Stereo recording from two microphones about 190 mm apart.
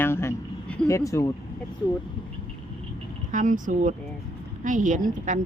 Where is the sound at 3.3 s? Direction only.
45° right (ahead or behind).